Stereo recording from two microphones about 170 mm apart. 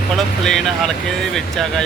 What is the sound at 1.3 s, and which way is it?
Speech, centre (ahead or behind).